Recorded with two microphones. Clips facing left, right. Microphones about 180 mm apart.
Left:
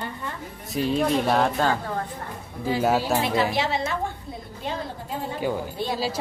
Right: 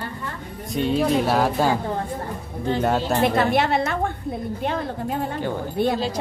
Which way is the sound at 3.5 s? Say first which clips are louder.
Right 5 dB; 55° right (ahead or behind).